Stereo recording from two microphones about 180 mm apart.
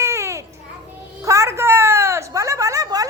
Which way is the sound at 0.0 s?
15° right (ahead or behind).